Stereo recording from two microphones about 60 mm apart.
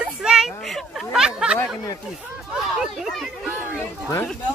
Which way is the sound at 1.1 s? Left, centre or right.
Centre.